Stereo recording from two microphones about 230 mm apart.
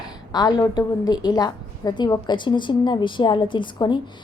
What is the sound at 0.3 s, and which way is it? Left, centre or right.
A woman's voice, centre.